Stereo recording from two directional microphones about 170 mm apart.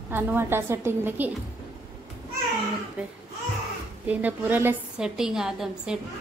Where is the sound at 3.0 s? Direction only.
5° right (ahead or behind).